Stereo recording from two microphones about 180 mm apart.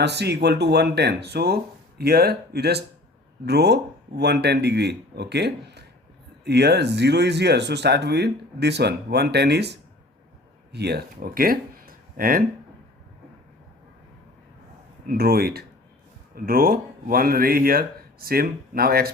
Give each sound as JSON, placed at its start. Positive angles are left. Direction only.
{"t": 0.0, "sound": "speech", "side_deg": -65}
{"t": 15.0, "sound": "speech", "side_deg": -55}